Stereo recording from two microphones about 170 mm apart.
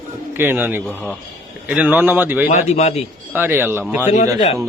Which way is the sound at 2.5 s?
40° left (ahead or behind).